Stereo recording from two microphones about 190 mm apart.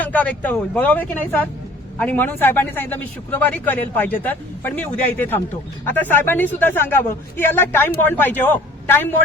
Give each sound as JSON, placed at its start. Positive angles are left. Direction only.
{"t": 0.0, "sound": "a man's voice", "side_deg": 10}